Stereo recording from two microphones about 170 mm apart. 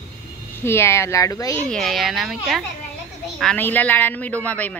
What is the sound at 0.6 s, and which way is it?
A man's voice, 15° left (ahead or behind).